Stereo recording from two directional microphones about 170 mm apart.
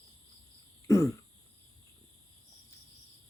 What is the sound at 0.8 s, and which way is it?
Throat clearing, 20° left (ahead or behind).